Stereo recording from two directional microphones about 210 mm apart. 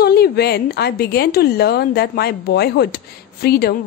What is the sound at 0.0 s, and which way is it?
A woman's voice, 50° left (ahead or behind).